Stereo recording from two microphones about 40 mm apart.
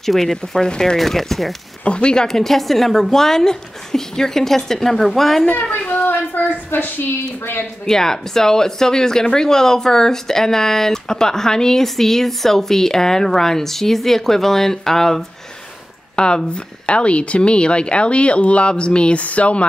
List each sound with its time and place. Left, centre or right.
0.0 s speech: centre
0.9 s speech: centre
1.9 s speech: left
2.2 s speech: centre
5.6 s a woman's voice: left
7.8 s speech: centre
16.2 s speech: left